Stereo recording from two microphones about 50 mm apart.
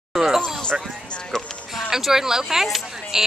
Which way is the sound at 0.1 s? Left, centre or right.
Centre.